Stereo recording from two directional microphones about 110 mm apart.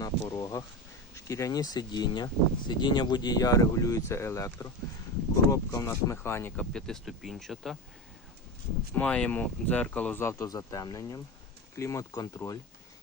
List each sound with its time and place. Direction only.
0.0 s a sound: 35° left (ahead or behind)
1.1 s speech: 30° left (ahead or behind)
6.6 s speech: 5° left (ahead or behind)
9.0 s speech: 10° left (ahead or behind); by 12.3 s 30° left (ahead or behind)